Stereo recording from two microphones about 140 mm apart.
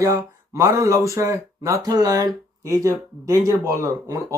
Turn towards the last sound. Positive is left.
turn(degrees=-20)  # may be behind; listen again after turning